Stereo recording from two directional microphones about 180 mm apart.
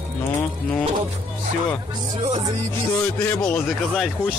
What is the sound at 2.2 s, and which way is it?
Music, 40° right (ahead or behind).